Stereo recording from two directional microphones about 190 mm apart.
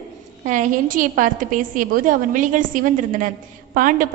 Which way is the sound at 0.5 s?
45° right (ahead or behind).